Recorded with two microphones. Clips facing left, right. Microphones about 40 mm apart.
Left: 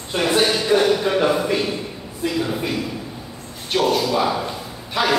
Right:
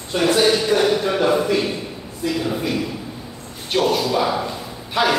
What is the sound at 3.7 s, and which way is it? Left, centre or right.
Speech, centre.